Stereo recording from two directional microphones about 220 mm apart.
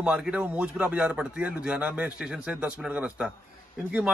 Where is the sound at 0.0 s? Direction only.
5° right (ahead or behind).